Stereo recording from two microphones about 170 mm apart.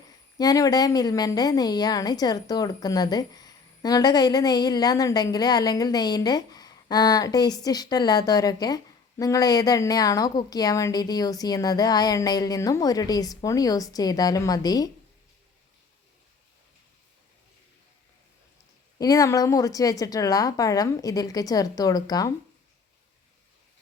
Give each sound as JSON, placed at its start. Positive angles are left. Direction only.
{"t": 0.3, "sound": "a woman's voice", "side_deg": 20}
{"t": 18.9, "sound": "a woman's voice", "side_deg": 20}